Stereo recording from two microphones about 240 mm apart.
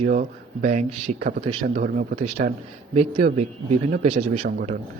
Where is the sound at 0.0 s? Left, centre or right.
Right.